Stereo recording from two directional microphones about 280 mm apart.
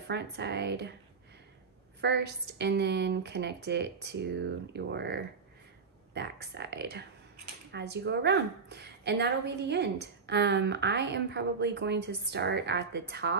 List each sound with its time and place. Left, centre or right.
0.1 s a woman's voice: right
2.0 s a woman's voice: right